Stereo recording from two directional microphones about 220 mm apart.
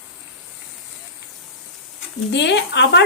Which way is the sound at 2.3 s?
55° left (ahead or behind).